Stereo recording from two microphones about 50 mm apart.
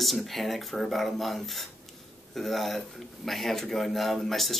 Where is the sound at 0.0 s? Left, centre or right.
Centre.